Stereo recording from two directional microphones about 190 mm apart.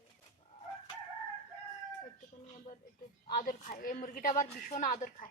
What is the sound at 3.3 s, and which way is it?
Speech, 45° left (ahead or behind).